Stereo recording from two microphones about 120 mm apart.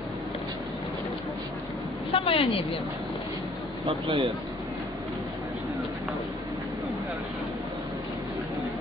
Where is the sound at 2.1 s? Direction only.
50° left (ahead or behind).